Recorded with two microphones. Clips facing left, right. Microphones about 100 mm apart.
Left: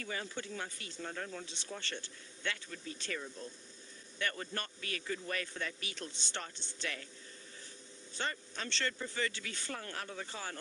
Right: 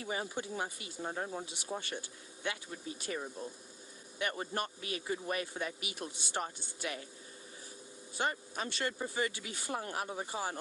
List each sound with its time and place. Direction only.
0.0 s a man's voice: 20° right (ahead or behind)
1.0 s speech: 25° right (ahead or behind)
1.9 s a man's voice: 15° right (ahead or behind)
8.1 s a man's voice: 15° right (ahead or behind)